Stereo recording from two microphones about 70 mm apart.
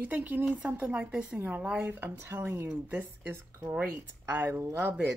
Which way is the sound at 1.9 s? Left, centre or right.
Right.